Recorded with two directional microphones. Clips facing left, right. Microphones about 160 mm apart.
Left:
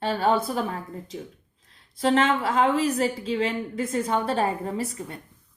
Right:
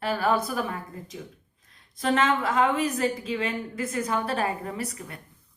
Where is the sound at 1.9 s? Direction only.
30° left (ahead or behind).